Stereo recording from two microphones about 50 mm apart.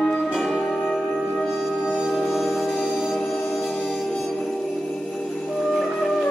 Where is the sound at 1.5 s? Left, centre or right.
Centre.